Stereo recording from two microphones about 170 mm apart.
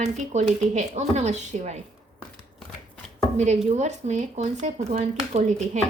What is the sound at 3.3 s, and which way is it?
Speech, 40° right (ahead or behind).